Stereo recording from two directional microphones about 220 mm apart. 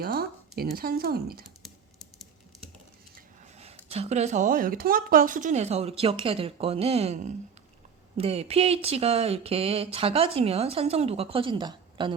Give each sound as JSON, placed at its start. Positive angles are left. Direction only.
{"t": 0.0, "sound": "speech", "side_deg": -45}
{"t": 3.2, "sound": "speech", "side_deg": -30}